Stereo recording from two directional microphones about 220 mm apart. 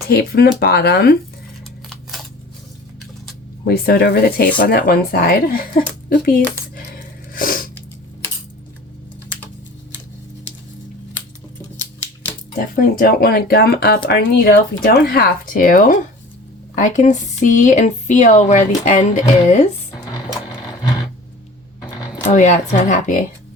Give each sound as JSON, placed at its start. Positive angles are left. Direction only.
{"t": 0.1, "sound": "speech", "side_deg": 45}
{"t": 1.9, "sound": "scissors", "side_deg": 0}
{"t": 3.6, "sound": "speech", "side_deg": 45}
{"t": 7.3, "sound": "a sound", "side_deg": 40}
{"t": 12.5, "sound": "speech", "side_deg": 40}
{"t": 22.2, "sound": "speech", "side_deg": 35}